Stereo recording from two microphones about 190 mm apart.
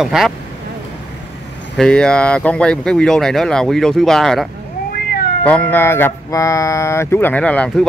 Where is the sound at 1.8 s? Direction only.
5° left (ahead or behind).